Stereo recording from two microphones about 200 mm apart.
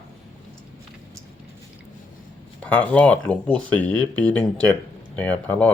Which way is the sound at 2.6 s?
5° left (ahead or behind).